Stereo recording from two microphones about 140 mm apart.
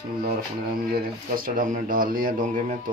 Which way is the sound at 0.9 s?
90° right.